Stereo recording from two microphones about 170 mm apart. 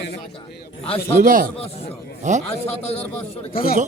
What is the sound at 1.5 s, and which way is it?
A man's voice, 35° left (ahead or behind).